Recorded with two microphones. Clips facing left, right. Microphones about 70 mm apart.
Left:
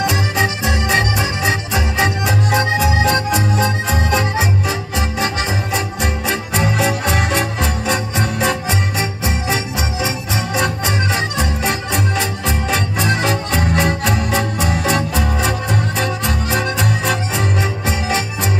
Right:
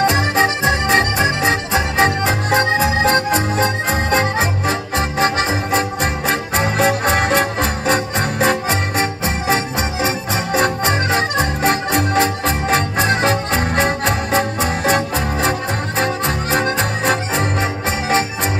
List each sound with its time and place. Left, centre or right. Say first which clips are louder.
0.0 s music: right 3 dB; right